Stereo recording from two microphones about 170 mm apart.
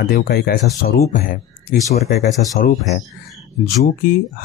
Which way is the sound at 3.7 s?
60° left (ahead or behind).